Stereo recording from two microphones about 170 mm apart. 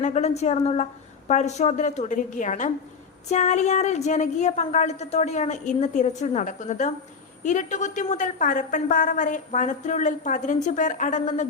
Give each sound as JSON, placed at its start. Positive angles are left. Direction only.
{"t": 0.0, "sound": "a woman's voice", "side_deg": 40}